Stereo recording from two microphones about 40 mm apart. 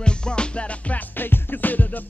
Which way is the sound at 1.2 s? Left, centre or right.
Left.